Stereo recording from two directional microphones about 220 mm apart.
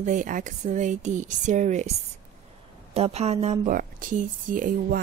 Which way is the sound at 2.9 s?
30° right (ahead or behind).